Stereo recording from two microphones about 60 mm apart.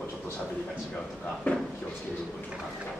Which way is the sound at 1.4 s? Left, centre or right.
Left.